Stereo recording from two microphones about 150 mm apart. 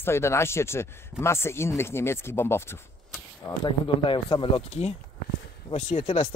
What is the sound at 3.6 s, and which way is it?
Speech, 35° left (ahead or behind).